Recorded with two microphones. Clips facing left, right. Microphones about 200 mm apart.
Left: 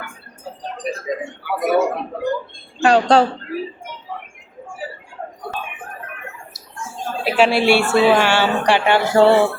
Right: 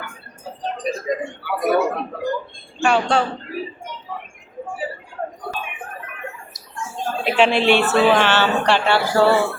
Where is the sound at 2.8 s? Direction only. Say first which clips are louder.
Left 5 dB; 35° left (ahead or behind).